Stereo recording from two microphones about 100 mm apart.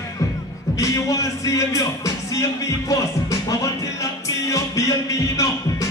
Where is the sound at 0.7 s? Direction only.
30° left (ahead or behind).